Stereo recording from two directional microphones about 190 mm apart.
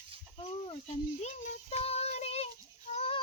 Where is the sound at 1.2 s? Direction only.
35° left (ahead or behind).